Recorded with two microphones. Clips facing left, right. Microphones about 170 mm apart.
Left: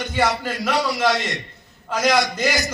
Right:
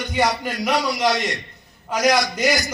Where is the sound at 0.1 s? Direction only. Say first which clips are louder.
Right 1 dB; 15° right (ahead or behind).